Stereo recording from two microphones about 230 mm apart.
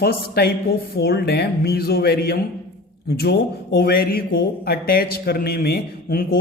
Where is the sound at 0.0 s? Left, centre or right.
Left.